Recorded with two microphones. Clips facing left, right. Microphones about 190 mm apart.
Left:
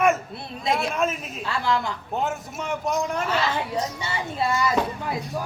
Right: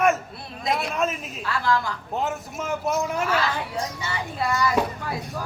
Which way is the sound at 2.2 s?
Centre (ahead or behind).